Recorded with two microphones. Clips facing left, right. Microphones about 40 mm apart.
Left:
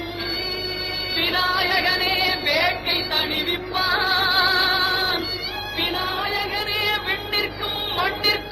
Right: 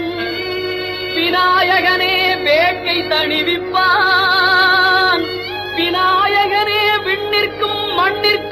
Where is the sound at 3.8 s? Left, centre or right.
Right.